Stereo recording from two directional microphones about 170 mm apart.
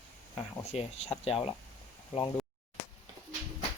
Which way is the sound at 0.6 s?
40° left (ahead or behind).